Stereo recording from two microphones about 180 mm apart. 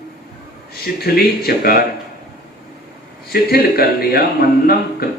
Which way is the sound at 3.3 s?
60° left (ahead or behind).